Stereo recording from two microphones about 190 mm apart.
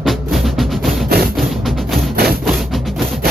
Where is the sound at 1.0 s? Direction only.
55° right (ahead or behind).